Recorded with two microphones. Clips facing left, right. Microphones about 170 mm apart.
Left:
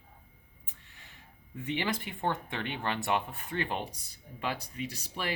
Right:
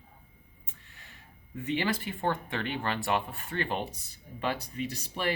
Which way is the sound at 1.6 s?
20° left (ahead or behind).